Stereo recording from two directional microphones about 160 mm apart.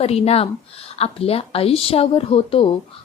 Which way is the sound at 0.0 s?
40° left (ahead or behind).